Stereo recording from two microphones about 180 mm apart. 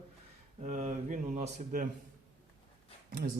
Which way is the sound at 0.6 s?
40° right (ahead or behind).